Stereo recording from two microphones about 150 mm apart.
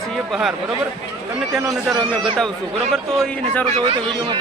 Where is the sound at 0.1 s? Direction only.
Centre (ahead or behind).